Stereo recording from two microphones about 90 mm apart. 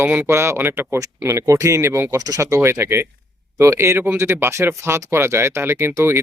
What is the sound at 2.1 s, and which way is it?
Speech, 40° right (ahead or behind).